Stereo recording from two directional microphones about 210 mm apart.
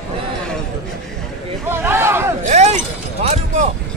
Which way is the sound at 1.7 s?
10° right (ahead or behind).